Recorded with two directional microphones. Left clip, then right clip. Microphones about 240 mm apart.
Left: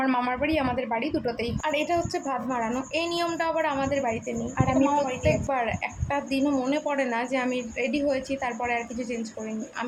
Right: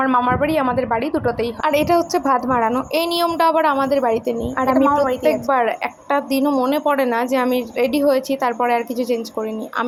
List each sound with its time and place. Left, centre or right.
0.0 s a woman's voice: centre
1.6 s a woman's voice: right